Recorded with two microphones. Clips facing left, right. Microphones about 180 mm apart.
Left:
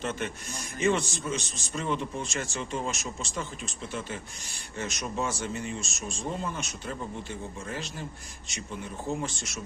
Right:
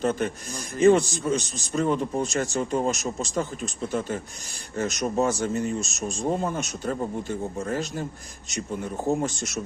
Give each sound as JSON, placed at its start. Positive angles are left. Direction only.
{"t": 0.0, "sound": "a man's voice", "side_deg": -40}